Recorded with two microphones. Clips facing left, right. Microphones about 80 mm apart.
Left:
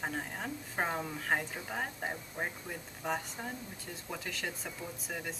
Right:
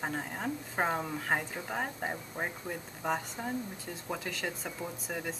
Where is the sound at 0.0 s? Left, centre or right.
Centre.